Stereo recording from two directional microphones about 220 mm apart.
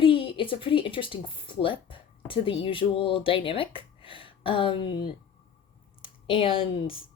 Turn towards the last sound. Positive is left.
turn(degrees=25)  # may be behind; listen again after turning